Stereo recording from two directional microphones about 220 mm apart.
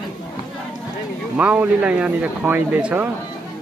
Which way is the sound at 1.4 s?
5° right (ahead or behind).